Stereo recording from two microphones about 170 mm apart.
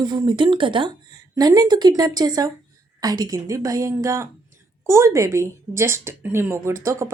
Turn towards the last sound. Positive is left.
turn(degrees=-15)  # may be behind; listen again after turning